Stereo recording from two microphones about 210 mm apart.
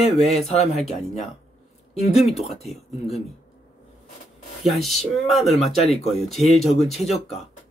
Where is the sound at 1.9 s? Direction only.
30° left (ahead or behind).